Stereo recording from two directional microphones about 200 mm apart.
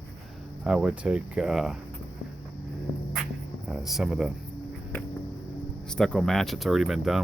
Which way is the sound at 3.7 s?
Centre (ahead or behind).